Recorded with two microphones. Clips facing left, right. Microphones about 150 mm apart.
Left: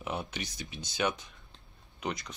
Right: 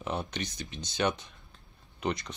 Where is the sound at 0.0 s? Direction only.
5° left (ahead or behind).